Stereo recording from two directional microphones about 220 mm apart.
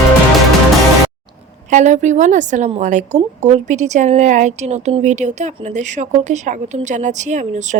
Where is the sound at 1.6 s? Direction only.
35° right (ahead or behind).